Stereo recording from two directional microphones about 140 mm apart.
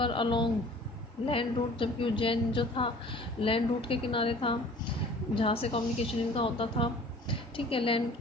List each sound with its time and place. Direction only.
0.0 s a woman's voice: 35° left (ahead or behind)